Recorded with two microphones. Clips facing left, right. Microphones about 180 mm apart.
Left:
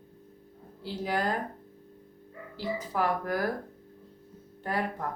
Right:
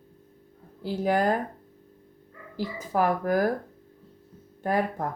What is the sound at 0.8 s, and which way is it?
Speech, 45° right (ahead or behind).